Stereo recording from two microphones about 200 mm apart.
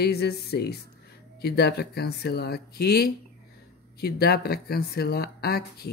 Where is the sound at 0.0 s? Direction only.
55° left (ahead or behind).